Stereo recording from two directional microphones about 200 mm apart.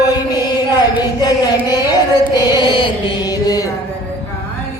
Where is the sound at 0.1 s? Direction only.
20° left (ahead or behind).